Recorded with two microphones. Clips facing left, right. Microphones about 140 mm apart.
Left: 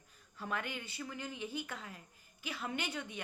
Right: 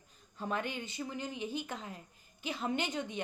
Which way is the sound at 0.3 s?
25° right (ahead or behind).